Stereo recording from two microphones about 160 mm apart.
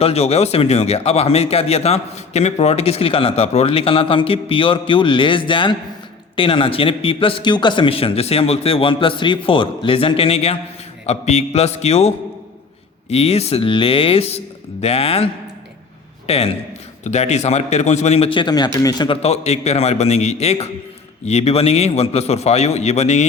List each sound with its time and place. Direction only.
0.0 s a man's voice: 40° left (ahead or behind)